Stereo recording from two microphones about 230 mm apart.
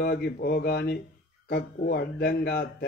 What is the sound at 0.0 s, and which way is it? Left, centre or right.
Speech, left.